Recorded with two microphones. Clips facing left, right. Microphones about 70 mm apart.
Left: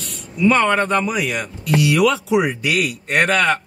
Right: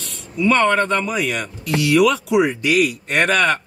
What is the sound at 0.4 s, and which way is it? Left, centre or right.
Speech, centre.